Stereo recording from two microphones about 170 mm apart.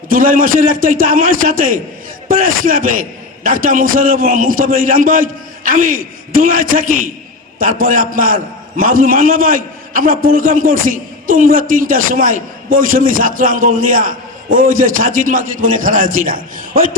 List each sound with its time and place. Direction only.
0.1 s a man's voice: 55° right (ahead or behind)